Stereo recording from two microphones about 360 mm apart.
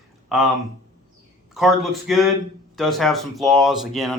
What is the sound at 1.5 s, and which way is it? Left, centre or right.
Speech, centre.